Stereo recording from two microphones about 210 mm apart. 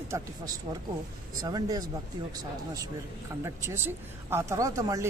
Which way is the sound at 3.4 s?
10° right (ahead or behind).